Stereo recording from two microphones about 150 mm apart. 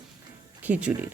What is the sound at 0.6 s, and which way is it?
Speech, 10° right (ahead or behind).